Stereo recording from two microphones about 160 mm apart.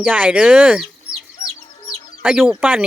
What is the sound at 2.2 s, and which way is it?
Speech, 5° right (ahead or behind).